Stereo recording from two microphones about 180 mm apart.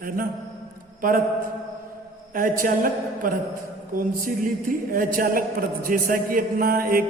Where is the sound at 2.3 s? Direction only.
50° right (ahead or behind).